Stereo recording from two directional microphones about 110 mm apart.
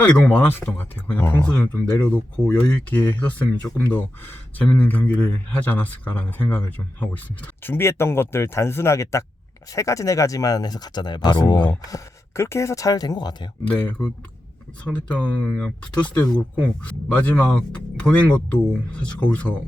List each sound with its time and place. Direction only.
0.0 s speech: 15° left (ahead or behind); by 11.7 s 45° left (ahead or behind)
11.7 s speech: 30° left (ahead or behind)
13.7 s speech: 10° left (ahead or behind)